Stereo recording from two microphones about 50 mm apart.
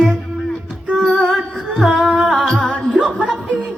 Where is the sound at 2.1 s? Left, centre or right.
Right.